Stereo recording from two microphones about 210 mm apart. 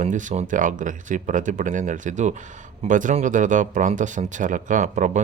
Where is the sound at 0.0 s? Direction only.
35° right (ahead or behind).